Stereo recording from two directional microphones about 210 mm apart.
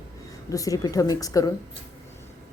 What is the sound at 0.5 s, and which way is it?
Speech, 15° left (ahead or behind).